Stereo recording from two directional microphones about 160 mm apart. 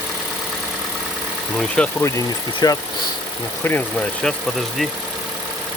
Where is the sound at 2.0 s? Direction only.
20° left (ahead or behind).